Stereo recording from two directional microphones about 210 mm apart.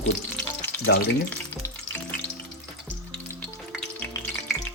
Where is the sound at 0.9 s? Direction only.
50° left (ahead or behind).